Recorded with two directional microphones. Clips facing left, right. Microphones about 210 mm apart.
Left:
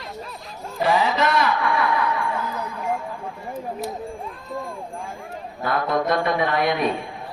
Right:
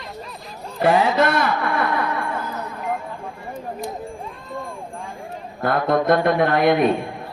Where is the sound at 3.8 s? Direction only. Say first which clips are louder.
Even; centre (ahead or behind).